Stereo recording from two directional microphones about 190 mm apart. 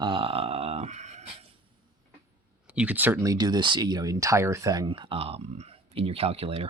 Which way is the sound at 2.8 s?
10° right (ahead or behind).